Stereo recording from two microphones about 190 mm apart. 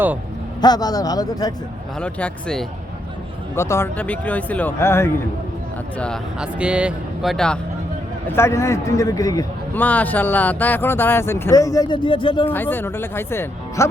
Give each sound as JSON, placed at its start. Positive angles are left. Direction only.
{"t": 0.6, "sound": "a man's voice", "side_deg": 20}
{"t": 2.0, "sound": "a man's voice", "side_deg": 5}
{"t": 6.0, "sound": "speech", "side_deg": 0}
{"t": 8.3, "sound": "a man's voice", "side_deg": 15}
{"t": 12.5, "sound": "a man's voice", "side_deg": 10}